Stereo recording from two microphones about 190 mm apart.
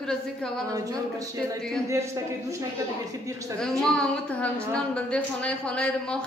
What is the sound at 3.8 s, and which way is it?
Speech, centre (ahead or behind).